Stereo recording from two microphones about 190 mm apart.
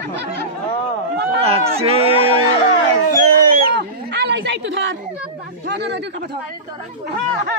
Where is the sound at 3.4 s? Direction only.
65° right (ahead or behind).